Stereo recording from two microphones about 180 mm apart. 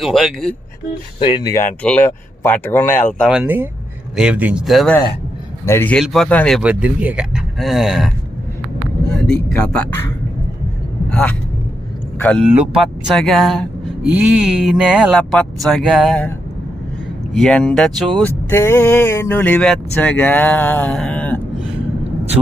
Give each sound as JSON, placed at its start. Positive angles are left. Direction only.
{"t": 0.0, "sound": "speech", "side_deg": 0}
{"t": 1.2, "sound": "speech", "side_deg": 20}
{"t": 1.8, "sound": "speech", "side_deg": 10}
{"t": 5.6, "sound": "speech", "side_deg": 10}
{"t": 6.6, "sound": "speech", "side_deg": -5}
{"t": 9.3, "sound": "speech", "side_deg": 5}
{"t": 11.1, "sound": "speech", "side_deg": 5}
{"t": 12.4, "sound": "speech", "side_deg": -5}
{"t": 17.3, "sound": "speech", "side_deg": 5}